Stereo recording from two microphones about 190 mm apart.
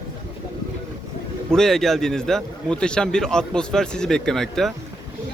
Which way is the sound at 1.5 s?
Centre (ahead or behind).